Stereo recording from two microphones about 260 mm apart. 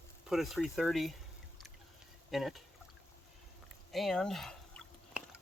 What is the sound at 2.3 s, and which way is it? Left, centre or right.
Speech, centre.